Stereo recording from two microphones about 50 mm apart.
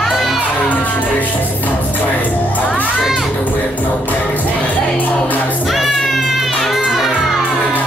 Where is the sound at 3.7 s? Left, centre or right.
Left.